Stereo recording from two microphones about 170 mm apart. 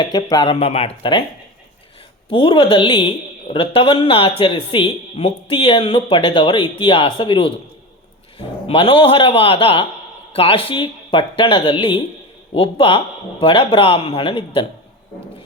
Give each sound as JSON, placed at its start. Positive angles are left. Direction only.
{"t": 0.0, "sound": "speech", "side_deg": 25}
{"t": 0.5, "sound": "speech", "side_deg": 35}
{"t": 2.3, "sound": "speech", "side_deg": 30}